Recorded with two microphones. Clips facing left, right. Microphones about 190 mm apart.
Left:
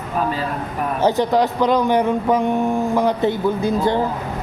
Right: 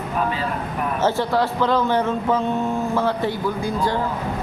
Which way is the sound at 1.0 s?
15° left (ahead or behind).